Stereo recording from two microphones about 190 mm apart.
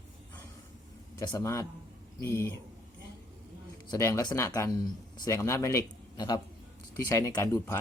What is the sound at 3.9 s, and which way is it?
A man's voice, 15° left (ahead or behind).